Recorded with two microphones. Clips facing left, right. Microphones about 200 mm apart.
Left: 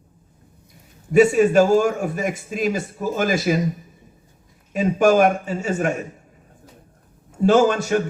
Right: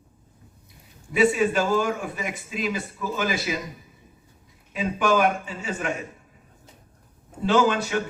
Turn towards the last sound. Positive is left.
turn(degrees=45)  # may be behind; listen again after turning